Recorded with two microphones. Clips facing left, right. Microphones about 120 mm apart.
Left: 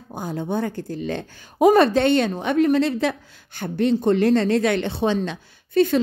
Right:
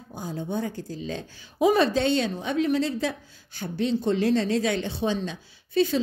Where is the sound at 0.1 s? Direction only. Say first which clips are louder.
Left 5 dB; 65° left (ahead or behind).